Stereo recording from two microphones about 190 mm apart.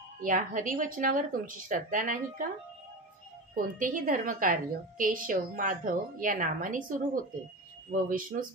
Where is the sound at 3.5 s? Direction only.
45° right (ahead or behind).